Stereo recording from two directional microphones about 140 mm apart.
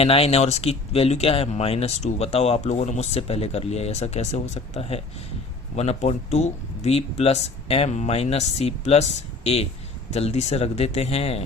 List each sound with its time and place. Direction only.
0.0 s speech: 45° left (ahead or behind)